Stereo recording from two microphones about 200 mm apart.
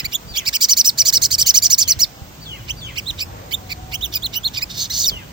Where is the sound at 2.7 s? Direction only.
20° right (ahead or behind).